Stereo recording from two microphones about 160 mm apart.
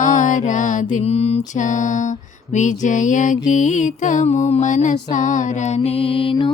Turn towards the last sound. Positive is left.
turn(degrees=35)  # may be behind; listen again after turning